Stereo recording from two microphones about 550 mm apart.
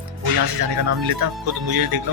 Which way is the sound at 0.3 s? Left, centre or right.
Right.